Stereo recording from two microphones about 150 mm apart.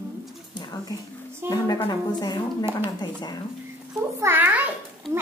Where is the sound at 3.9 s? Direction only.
15° right (ahead or behind).